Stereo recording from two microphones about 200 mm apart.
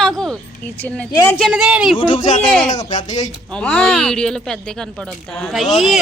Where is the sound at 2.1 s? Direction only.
40° left (ahead or behind).